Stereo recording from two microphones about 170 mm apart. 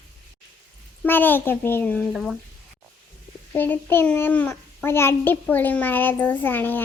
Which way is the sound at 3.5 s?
10° left (ahead or behind).